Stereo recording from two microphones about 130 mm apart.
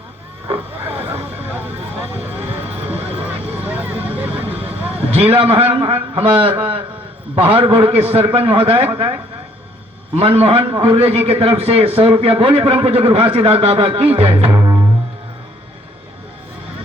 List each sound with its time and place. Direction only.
1.0 s vehicle: 50° right (ahead or behind)
3.2 s vehicle: 15° right (ahead or behind)
5.1 s a man's voice: 50° right (ahead or behind)
10.2 s a man's voice: 50° right (ahead or behind)
14.5 s music: 30° right (ahead or behind)